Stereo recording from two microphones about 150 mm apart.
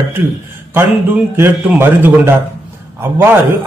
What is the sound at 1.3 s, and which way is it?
A man's voice, 15° right (ahead or behind).